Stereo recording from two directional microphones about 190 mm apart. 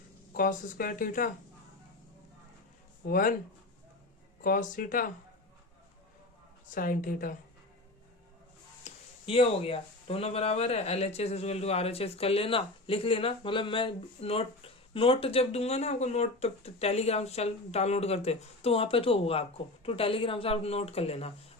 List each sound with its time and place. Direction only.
0.3 s speech: 50° left (ahead or behind)
3.1 s speech: 45° left (ahead or behind)
4.4 s speech: 45° left (ahead or behind)
6.7 s speech: 45° left (ahead or behind)
8.8 s speech: 30° left (ahead or behind)